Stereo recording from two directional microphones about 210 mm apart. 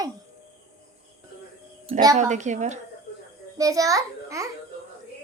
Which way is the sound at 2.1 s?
35° right (ahead or behind).